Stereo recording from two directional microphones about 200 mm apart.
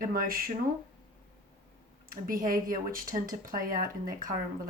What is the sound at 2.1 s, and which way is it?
Speech, 45° right (ahead or behind).